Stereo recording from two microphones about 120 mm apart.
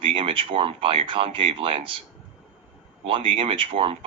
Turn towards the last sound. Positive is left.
turn(degrees=-50)  # may be behind; listen again after turning